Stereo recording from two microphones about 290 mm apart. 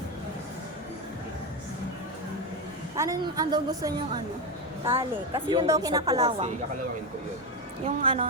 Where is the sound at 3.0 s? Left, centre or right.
Centre.